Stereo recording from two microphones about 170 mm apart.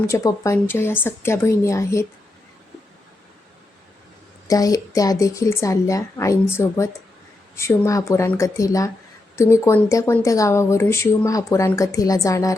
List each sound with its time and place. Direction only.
0.1 s speech: 20° left (ahead or behind)
4.4 s speech: 20° left (ahead or behind)